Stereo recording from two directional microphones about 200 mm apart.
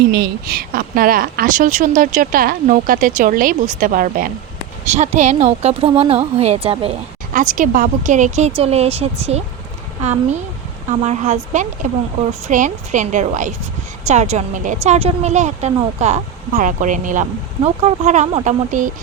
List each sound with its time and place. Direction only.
0.1 s a woman's voice: 50° right (ahead or behind); by 6.9 s 30° right (ahead or behind)
7.3 s a woman's voice: 40° right (ahead or behind)